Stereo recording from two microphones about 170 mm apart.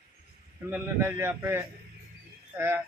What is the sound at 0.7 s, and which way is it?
A man's voice, 15° right (ahead or behind).